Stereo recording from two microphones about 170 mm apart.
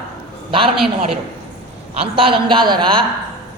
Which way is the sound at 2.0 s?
30° right (ahead or behind).